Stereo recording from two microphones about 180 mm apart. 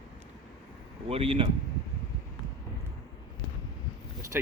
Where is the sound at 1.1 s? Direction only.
30° right (ahead or behind).